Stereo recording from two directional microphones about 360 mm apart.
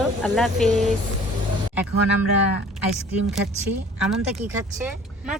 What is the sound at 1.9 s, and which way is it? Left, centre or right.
Speech, left.